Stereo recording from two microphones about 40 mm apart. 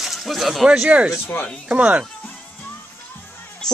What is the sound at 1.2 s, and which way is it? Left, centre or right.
Speech, left.